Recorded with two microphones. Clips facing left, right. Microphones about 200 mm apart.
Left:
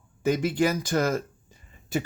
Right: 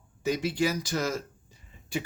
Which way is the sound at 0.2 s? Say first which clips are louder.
Left 4 dB; 50° left (ahead or behind).